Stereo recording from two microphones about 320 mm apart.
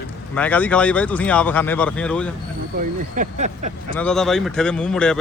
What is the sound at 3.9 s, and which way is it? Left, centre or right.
Speech, centre.